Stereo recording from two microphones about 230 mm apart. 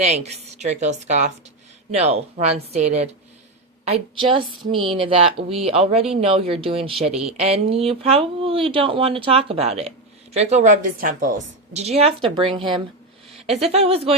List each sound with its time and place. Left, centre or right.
0.0 s a woman's voice: right